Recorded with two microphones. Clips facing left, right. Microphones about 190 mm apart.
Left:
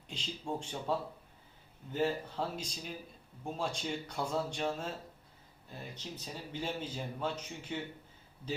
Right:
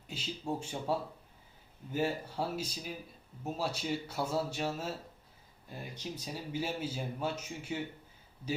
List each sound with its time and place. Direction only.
0.1 s speech: 5° right (ahead or behind)